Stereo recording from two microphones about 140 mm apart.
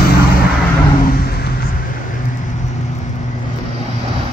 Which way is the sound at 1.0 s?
90° left.